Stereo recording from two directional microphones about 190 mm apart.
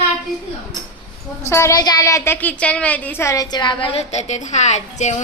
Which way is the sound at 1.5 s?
15° left (ahead or behind).